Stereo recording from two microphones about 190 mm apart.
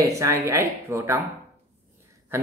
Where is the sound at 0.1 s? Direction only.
15° right (ahead or behind).